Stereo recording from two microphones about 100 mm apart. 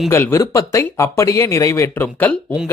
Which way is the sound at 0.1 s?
25° left (ahead or behind).